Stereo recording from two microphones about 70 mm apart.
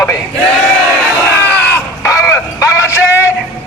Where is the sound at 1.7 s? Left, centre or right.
Left.